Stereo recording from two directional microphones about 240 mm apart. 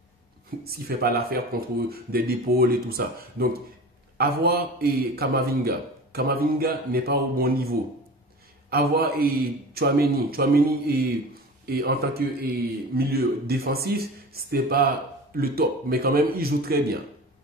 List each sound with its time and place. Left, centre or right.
0.7 s speech: right